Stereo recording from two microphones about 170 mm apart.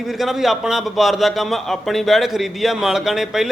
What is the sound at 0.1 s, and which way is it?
A man's voice, centre (ahead or behind).